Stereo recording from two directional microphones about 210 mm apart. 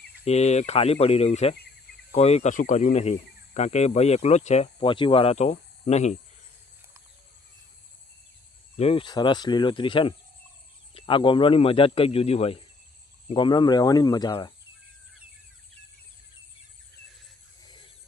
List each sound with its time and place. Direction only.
0.3 s speech: 30° left (ahead or behind)
8.7 s a man's voice: 30° left (ahead or behind)